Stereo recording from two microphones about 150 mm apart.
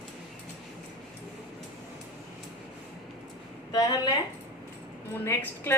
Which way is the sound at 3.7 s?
30° left (ahead or behind).